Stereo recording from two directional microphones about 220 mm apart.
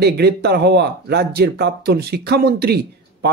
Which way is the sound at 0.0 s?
50° right (ahead or behind).